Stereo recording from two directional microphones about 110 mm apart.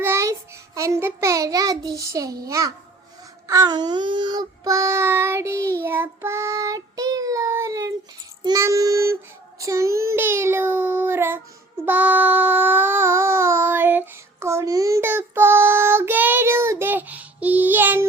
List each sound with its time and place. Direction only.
0.0 s child singing: 25° right (ahead or behind); by 4.7 s 40° right (ahead or behind)
4.7 s child singing: 25° right (ahead or behind)